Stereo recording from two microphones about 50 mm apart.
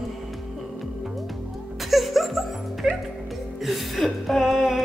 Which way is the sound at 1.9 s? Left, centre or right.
Centre.